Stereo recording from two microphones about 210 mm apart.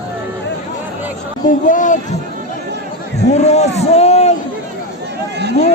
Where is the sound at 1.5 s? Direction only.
40° left (ahead or behind).